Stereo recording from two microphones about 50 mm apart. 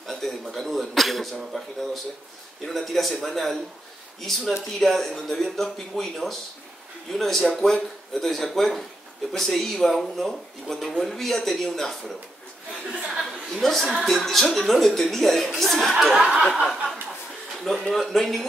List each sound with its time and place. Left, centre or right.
0.0 s speech: centre
12.9 s speech: right
13.2 s speech: centre
16.2 s a sound: centre
17.9 s speech: centre